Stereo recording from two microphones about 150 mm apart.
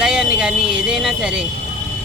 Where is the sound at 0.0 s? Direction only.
5° right (ahead or behind).